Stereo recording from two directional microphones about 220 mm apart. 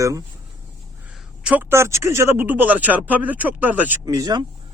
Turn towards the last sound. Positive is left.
turn(degrees=-15)  # may be behind; listen again after turning